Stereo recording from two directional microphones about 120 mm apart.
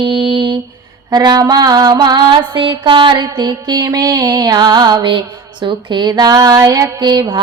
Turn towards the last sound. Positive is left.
turn(degrees=-40)  # may be behind; listen again after turning